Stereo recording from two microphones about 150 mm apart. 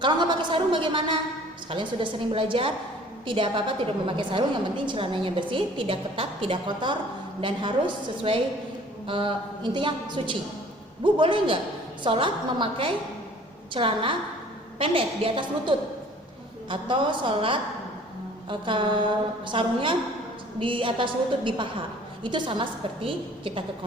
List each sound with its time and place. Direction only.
0.0 s a woman's voice: 30° right (ahead or behind)